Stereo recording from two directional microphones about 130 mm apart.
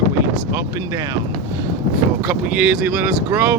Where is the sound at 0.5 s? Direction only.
20° right (ahead or behind).